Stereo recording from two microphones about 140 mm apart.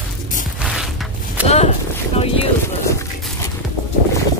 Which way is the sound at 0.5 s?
Centre (ahead or behind).